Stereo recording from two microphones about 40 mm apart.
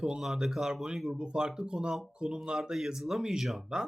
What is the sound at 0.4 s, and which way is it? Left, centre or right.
Speech, centre.